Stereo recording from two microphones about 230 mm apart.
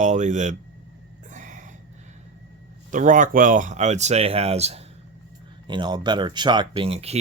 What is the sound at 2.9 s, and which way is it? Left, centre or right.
Speech, right.